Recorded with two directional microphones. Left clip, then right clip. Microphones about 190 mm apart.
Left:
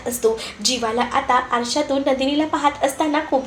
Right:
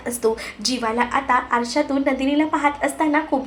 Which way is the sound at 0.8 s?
30° right (ahead or behind).